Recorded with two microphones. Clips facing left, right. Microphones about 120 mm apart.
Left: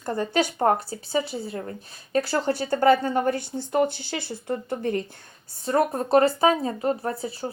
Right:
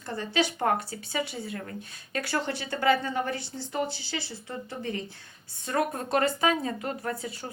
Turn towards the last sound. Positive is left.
turn(degrees=30)  # may be behind; listen again after turning